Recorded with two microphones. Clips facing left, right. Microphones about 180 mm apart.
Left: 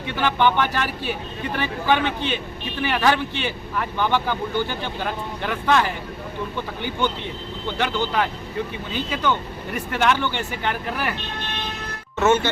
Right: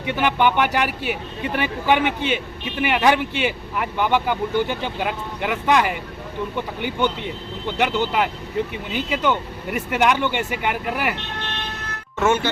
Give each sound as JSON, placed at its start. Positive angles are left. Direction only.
{"t": 0.0, "sound": "speech", "side_deg": -15}
{"t": 7.8, "sound": "speech", "side_deg": -15}
{"t": 12.2, "sound": "speech", "side_deg": -10}